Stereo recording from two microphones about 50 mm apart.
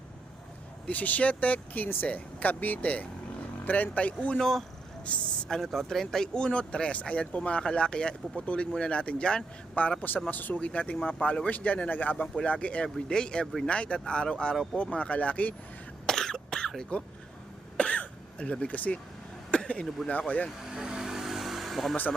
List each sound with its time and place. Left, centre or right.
0.9 s speech: left
4.4 s speech: centre
5.0 s speech: left
5.5 s speech: centre
9.8 s speech: left
12.4 s speech: left
16.0 s cough: centre
17.7 s throat clearing: left
18.6 s speech: left
19.5 s a sound: left
20.1 s speech: left
20.7 s vehicle: centre